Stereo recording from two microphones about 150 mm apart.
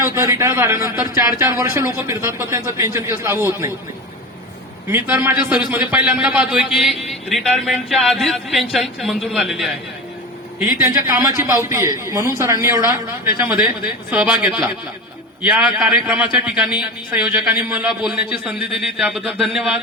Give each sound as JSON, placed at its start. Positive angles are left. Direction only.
{"t": 0.0, "sound": "speech", "side_deg": -20}
{"t": 4.9, "sound": "a man's voice", "side_deg": -15}
{"t": 10.8, "sound": "a man's voice", "side_deg": -20}
{"t": 14.1, "sound": "a man's voice", "side_deg": -10}